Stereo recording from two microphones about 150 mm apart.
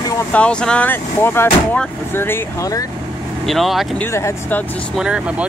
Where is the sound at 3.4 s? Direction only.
Centre (ahead or behind).